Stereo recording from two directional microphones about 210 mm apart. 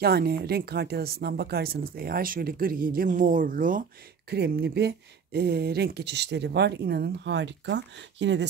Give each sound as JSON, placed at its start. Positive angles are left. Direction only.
{"t": 0.0, "sound": "speech", "side_deg": -50}
{"t": 4.3, "sound": "speech", "side_deg": -50}